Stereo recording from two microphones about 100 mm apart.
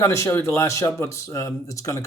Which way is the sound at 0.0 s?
30° left (ahead or behind).